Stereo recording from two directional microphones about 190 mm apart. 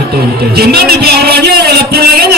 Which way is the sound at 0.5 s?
55° right (ahead or behind).